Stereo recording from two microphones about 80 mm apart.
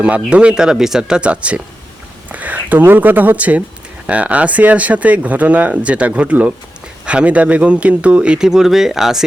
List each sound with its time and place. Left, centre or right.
0.0 s speech: centre